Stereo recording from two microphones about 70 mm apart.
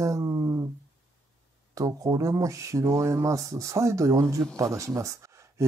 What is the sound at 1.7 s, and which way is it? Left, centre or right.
Speech, right.